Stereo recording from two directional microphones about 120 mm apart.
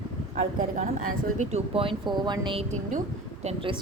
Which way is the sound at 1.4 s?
75° right (ahead or behind).